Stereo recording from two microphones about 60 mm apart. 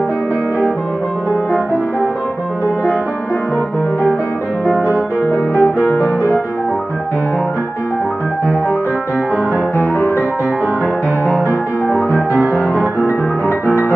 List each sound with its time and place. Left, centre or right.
5.2 s music: left
5.9 s piano: left
9.8 s music: left
12.3 s music: right